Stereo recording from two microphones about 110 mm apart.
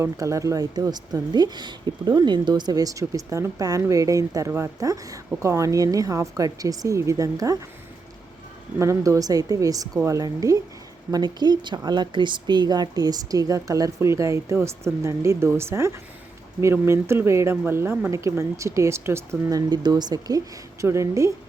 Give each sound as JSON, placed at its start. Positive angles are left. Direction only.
{"t": 0.0, "sound": "a woman's voice", "side_deg": -30}
{"t": 8.8, "sound": "a woman's voice", "side_deg": -30}
{"t": 20.8, "sound": "speech", "side_deg": -25}